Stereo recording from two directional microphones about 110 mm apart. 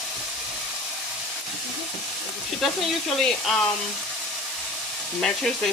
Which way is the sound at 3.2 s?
5° left (ahead or behind).